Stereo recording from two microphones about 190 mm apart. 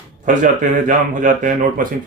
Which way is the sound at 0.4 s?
40° right (ahead or behind).